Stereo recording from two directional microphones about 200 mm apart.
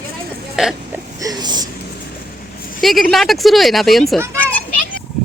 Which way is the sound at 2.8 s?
Centre (ahead or behind).